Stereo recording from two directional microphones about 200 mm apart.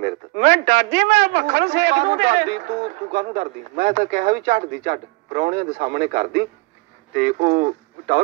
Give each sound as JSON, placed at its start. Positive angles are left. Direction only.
{"t": 0.0, "sound": "a man's voice", "side_deg": -35}